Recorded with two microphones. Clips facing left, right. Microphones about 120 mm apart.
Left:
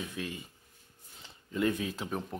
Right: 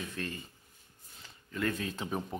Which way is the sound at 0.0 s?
10° left (ahead or behind).